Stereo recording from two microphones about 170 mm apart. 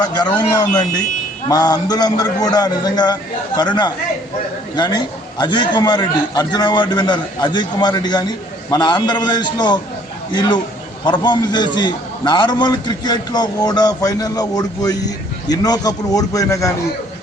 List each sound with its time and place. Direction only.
0.0 s a man's voice: 25° left (ahead or behind)
11.0 s a man's voice: 25° left (ahead or behind)